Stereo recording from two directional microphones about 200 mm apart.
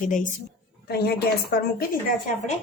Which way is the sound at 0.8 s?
50° left (ahead or behind).